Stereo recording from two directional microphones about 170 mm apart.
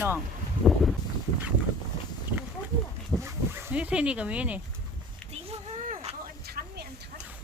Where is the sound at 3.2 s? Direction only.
15° right (ahead or behind).